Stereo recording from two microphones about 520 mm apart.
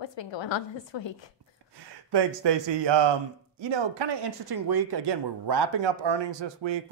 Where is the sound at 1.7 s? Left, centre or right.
Right.